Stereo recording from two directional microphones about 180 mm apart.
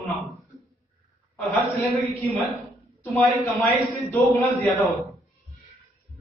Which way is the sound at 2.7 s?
Centre (ahead or behind).